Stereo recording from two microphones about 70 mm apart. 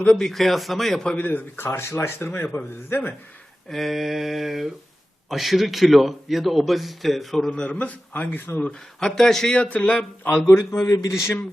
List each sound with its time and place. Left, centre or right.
0.0 s a man's voice: centre
1.1 s speech: left
3.7 s a man's voice: centre
7.6 s speech: centre
9.0 s speech: centre
9.6 s speech: centre
10.4 s a man's voice: left